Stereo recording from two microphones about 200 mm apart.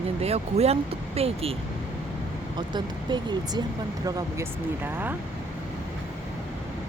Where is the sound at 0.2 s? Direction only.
30° right (ahead or behind).